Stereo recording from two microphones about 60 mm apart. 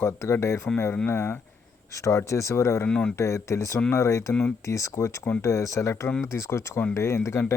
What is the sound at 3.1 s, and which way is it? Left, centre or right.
Speech, left.